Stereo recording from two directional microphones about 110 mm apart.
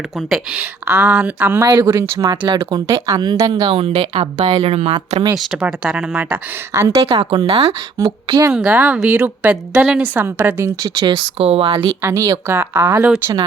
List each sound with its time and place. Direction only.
0.5 s a woman's voice: 20° right (ahead or behind)
1.6 s speech: 40° right (ahead or behind)
1.9 s speech: 25° right (ahead or behind)
2.4 s speech: 45° right (ahead or behind); by 4.9 s 65° right (ahead or behind)
5.4 s a woman's voice: 5° right (ahead or behind)
6.7 s speech: 30° right (ahead or behind)
7.1 s speech: 55° right (ahead or behind)
7.9 s a woman's voice: 35° right (ahead or behind)
8.4 s a woman's voice: 10° right (ahead or behind); by 10.9 s 25° right (ahead or behind)
10.9 s speech: 45° right (ahead or behind)
11.3 s speech: 65° right (ahead or behind)
12.0 s speech: 30° right (ahead or behind)